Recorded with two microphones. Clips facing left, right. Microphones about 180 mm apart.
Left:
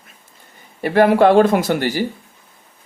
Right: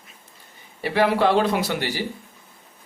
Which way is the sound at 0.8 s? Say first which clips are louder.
Left 7 dB; 50° left (ahead or behind).